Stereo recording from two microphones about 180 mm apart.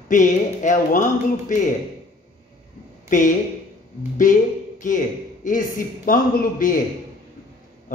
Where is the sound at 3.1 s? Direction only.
45° left (ahead or behind).